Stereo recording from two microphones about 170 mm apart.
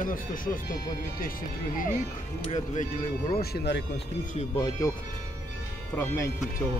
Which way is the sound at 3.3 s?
70° left (ahead or behind).